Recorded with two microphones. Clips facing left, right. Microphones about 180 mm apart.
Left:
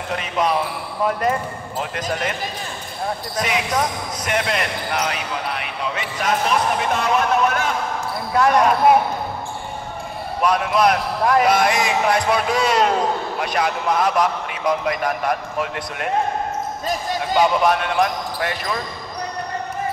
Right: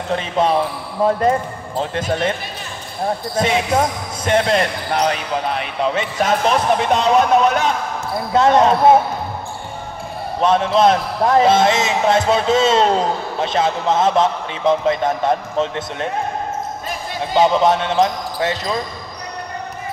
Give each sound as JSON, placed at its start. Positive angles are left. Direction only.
{"t": 0.1, "sound": "speech", "side_deg": -30}
{"t": 3.3, "sound": "speech", "side_deg": -30}
{"t": 10.4, "sound": "speech", "side_deg": -25}
{"t": 17.2, "sound": "speech", "side_deg": -25}